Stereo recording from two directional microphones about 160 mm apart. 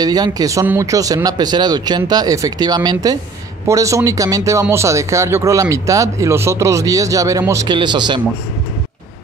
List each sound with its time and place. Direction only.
0.0 s speech: 25° right (ahead or behind)